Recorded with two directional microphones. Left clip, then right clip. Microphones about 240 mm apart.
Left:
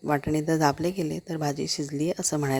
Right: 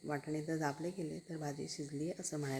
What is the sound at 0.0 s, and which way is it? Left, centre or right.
Speech, left.